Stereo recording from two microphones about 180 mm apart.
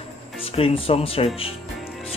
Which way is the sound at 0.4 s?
30° left (ahead or behind).